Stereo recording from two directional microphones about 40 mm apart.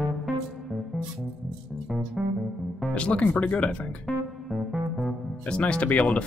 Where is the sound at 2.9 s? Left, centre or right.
Left.